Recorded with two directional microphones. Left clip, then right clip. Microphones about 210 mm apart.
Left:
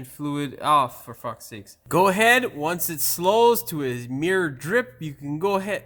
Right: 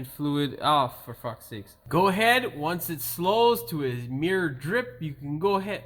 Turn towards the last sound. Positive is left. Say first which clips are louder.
# left 2 dB
turn(degrees=50)  # may be behind; listen again after turning